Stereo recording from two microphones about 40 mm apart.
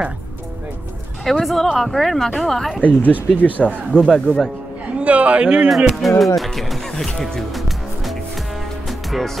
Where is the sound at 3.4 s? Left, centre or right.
Left.